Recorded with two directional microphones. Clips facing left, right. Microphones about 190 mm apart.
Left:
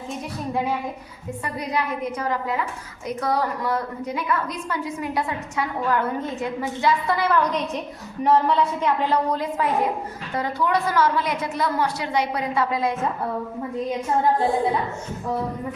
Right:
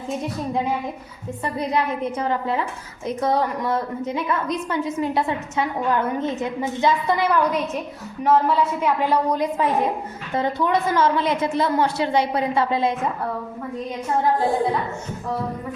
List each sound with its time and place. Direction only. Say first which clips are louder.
1.5 s a woman's voice: right 3 dB; 25° right (ahead or behind)
8.2 s a woman's voice: right 1 dB; centre (ahead or behind); by 13.0 s 25° right (ahead or behind)